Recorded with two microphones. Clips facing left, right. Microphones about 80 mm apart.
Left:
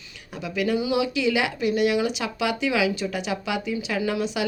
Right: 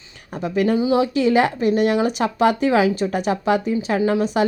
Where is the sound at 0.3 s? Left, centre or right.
Right.